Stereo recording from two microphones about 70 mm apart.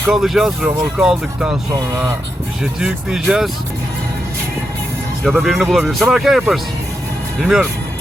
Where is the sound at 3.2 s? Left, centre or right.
Centre.